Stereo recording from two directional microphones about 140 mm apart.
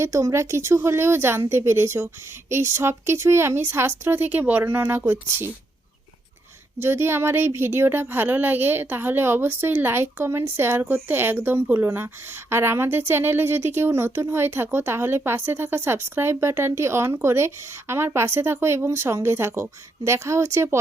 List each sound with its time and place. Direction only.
0.0 s a woman's voice: 20° right (ahead or behind)
6.7 s a woman's voice: 15° right (ahead or behind)